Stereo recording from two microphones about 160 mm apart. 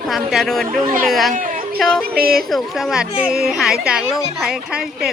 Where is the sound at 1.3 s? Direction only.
60° right (ahead or behind).